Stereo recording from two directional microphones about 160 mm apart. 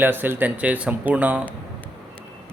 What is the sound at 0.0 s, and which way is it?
Speech, 10° right (ahead or behind).